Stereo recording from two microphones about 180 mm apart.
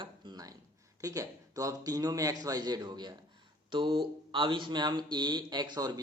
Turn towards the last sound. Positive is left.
turn(degrees=-20)  # may be behind; listen again after turning